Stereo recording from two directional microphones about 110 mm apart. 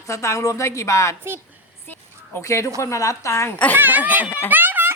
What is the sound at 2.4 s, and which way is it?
A woman's voice, 25° left (ahead or behind).